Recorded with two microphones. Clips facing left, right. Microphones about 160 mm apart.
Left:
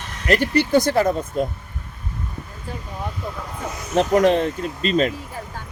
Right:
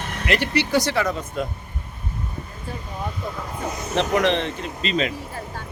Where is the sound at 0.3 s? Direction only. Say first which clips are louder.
Left 4 dB; 45° left (ahead or behind).